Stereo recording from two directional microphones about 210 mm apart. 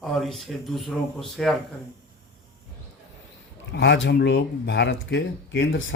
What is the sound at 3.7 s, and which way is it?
Speech, 55° left (ahead or behind).